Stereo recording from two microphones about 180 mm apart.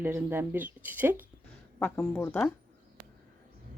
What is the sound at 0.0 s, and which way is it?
Speech, 10° right (ahead or behind).